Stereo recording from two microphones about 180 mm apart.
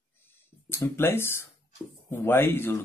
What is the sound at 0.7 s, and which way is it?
Speech, 15° left (ahead or behind).